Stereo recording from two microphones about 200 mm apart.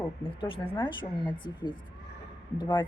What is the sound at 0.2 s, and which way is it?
A woman's voice, 25° left (ahead or behind).